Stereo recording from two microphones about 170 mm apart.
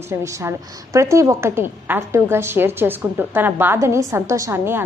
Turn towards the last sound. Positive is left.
turn(degrees=-15)  # may be behind; listen again after turning